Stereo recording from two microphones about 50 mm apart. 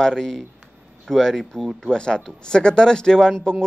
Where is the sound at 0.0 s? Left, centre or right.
Centre.